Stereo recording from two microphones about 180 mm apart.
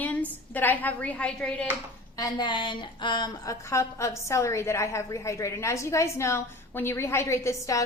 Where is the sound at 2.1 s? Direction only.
25° left (ahead or behind).